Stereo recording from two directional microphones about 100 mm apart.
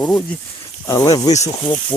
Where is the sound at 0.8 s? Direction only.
40° left (ahead or behind).